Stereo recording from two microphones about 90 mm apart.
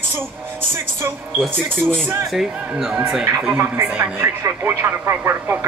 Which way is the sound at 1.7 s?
5° left (ahead or behind).